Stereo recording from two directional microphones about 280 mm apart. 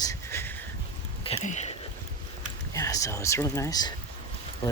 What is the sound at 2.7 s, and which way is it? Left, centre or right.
Speech, centre.